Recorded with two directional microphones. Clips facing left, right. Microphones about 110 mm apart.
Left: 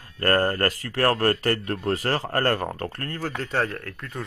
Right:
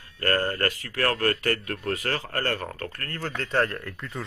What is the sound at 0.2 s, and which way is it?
Speech, 40° left (ahead or behind).